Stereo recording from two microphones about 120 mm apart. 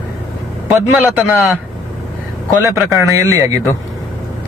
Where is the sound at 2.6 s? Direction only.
25° right (ahead or behind).